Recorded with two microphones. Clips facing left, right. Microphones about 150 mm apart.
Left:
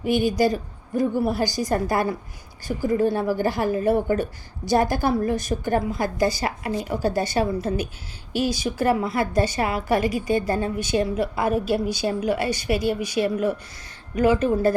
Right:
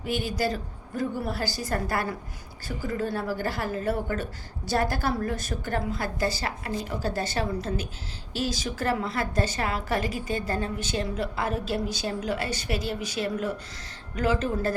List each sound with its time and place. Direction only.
0.0 s a woman's voice: 15° left (ahead or behind)